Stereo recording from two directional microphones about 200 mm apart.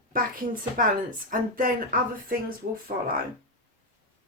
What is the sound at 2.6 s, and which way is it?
Speech, 45° right (ahead or behind).